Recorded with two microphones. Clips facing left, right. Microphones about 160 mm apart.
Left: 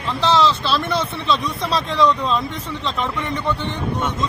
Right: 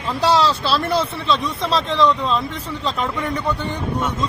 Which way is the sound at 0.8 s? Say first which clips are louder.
Right 2 dB; 30° right (ahead or behind).